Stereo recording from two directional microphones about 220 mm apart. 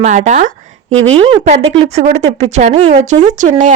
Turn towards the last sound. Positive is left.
turn(degrees=-35)  # may be behind; listen again after turning